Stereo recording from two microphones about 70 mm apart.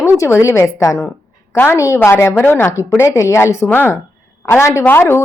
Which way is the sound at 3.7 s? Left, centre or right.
Left.